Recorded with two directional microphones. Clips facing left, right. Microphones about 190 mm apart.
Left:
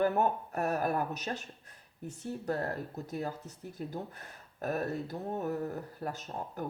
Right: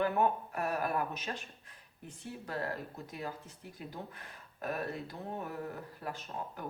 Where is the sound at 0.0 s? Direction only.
40° left (ahead or behind).